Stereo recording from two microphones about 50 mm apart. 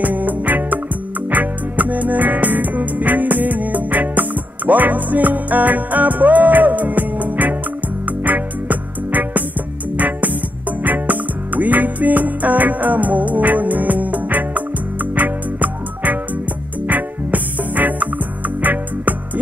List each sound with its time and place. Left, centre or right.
0.0 s music: right